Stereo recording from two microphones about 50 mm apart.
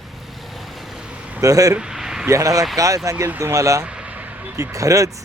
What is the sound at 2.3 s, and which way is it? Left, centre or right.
Speech, right.